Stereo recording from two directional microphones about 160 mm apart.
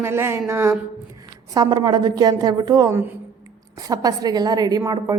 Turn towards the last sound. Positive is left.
turn(degrees=-25)  # may be behind; listen again after turning